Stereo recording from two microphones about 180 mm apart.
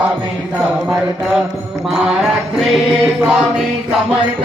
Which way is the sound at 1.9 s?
5° right (ahead or behind).